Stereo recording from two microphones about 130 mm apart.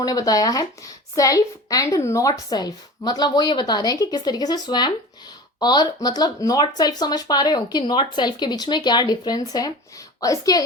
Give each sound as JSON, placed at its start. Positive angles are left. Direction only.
{"t": 0.0, "sound": "speech", "side_deg": 30}